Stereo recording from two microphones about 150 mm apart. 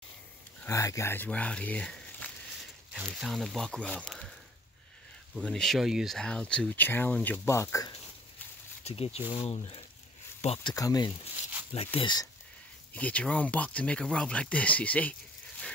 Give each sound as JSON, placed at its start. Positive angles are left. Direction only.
{"t": 0.7, "sound": "speech", "side_deg": 20}
{"t": 3.0, "sound": "speech", "side_deg": -5}
{"t": 5.4, "sound": "speech", "side_deg": 5}
{"t": 8.8, "sound": "speech", "side_deg": 40}
{"t": 10.7, "sound": "speech", "side_deg": 25}
{"t": 11.7, "sound": "speech", "side_deg": 40}
{"t": 12.9, "sound": "speech", "side_deg": 10}